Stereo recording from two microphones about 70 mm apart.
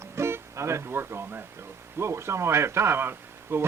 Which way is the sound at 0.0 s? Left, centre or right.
Right.